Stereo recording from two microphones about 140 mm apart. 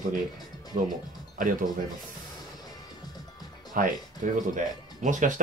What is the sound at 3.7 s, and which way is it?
Speech, 70° right (ahead or behind).